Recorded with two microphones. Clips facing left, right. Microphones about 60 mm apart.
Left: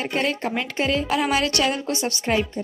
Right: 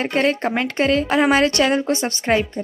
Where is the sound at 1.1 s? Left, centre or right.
Right.